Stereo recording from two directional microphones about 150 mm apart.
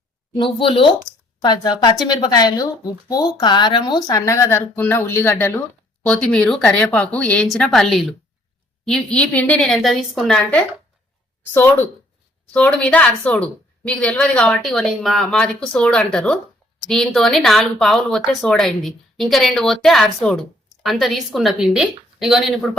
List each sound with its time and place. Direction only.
0.3 s speech: 35° left (ahead or behind); by 10.6 s 5° left (ahead or behind)
12.5 s a woman's voice: 10° left (ahead or behind)